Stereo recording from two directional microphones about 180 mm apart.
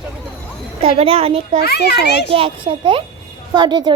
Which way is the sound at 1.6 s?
60° left (ahead or behind).